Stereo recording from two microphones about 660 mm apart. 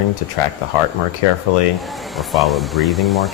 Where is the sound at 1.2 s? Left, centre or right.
Left.